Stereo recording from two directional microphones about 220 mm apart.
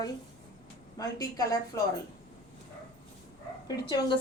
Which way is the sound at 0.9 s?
15° left (ahead or behind).